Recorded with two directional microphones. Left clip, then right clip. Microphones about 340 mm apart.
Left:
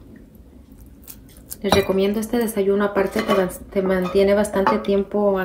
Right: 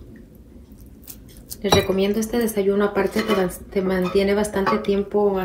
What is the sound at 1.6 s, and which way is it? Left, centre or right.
Speech, left.